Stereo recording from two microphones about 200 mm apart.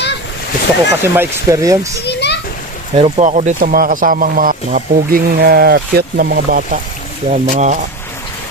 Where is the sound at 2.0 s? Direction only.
55° left (ahead or behind).